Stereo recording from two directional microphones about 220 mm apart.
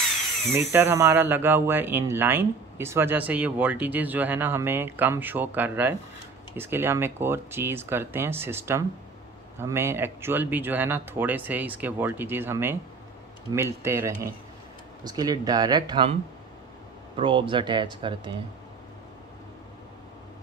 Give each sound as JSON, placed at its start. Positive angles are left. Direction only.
{"t": 0.6, "sound": "speech", "side_deg": -10}
{"t": 17.2, "sound": "speech", "side_deg": -20}